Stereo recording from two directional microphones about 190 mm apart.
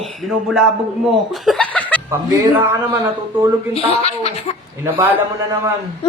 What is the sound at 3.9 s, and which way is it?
Speech, 35° left (ahead or behind).